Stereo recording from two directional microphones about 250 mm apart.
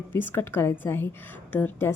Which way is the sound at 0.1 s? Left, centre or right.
Centre.